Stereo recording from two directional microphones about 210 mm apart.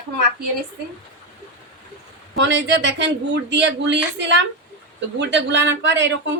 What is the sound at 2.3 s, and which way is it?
Speech, 55° right (ahead or behind).